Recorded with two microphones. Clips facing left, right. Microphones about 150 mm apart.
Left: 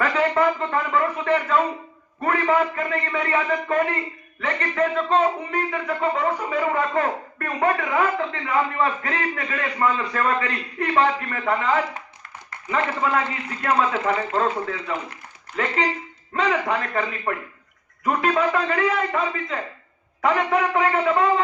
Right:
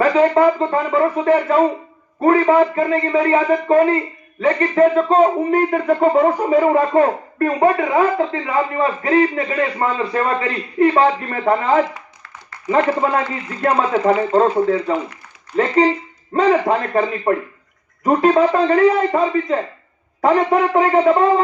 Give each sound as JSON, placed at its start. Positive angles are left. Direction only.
{"t": 0.0, "sound": "speech", "side_deg": -30}